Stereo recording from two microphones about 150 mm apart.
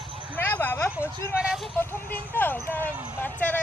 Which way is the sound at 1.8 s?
15° left (ahead or behind).